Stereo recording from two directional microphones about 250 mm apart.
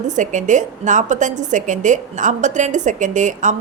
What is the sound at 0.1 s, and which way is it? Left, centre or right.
A woman's voice, right.